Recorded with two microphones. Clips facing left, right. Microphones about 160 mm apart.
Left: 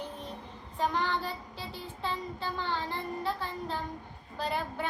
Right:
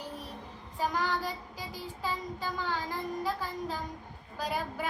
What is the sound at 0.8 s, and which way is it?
Child singing, 10° right (ahead or behind).